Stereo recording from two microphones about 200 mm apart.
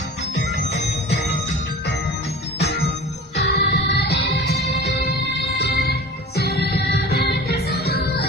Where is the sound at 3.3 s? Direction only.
55° left (ahead or behind).